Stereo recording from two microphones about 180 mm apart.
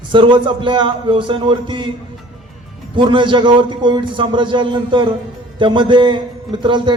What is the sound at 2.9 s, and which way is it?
A man's voice, 25° right (ahead or behind).